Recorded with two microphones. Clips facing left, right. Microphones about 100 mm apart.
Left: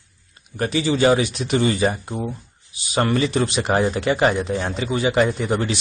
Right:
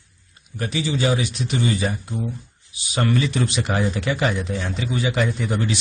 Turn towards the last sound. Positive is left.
turn(degrees=40)  # may be behind; listen again after turning